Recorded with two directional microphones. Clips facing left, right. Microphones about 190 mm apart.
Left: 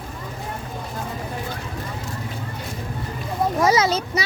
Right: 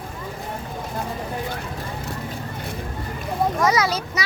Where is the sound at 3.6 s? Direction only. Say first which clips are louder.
Left 5 dB; 25° left (ahead or behind).